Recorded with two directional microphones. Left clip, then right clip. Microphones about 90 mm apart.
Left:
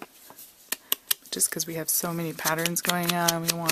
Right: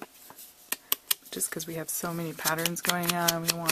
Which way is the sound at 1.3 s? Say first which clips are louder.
Left 5 dB; 30° left (ahead or behind).